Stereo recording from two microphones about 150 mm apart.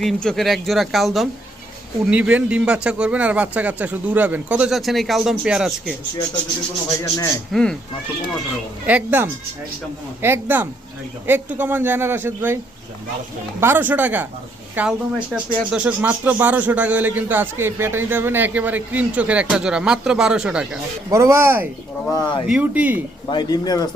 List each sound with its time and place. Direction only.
0.0 s speech: 5° left (ahead or behind)
7.5 s speech: 5° left (ahead or behind)
8.9 s speech: 10° right (ahead or behind)
13.6 s speech: 15° right (ahead or behind)
21.1 s speech: 20° right (ahead or behind)
22.1 s speech: 30° left (ahead or behind)
22.4 s speech: 5° right (ahead or behind)
23.3 s speech: 30° left (ahead or behind)